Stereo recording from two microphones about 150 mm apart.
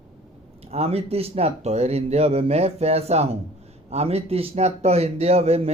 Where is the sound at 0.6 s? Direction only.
40° right (ahead or behind).